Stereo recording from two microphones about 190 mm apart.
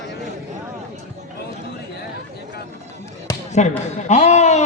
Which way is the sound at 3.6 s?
40° left (ahead or behind).